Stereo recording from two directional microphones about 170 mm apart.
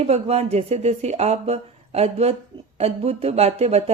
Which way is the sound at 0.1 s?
40° right (ahead or behind).